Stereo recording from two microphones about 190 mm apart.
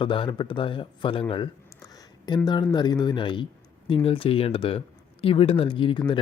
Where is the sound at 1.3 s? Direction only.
25° left (ahead or behind).